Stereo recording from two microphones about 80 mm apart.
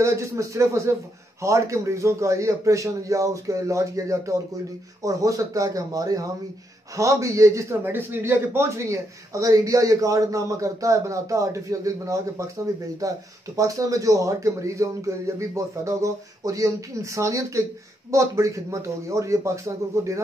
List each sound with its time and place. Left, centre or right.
0.0 s a man's voice: right
7.8 s a man's voice: right